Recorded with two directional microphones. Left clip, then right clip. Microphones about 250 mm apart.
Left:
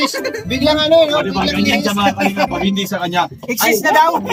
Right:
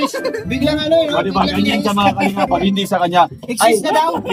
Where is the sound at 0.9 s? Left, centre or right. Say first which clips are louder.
Even; centre.